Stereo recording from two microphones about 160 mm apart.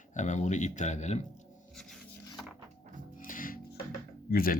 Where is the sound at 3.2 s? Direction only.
60° left (ahead or behind).